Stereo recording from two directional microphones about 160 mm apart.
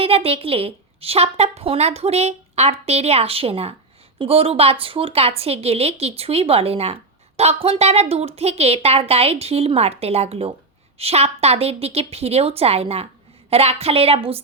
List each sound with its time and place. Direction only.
0.0 s speech: 35° right (ahead or behind)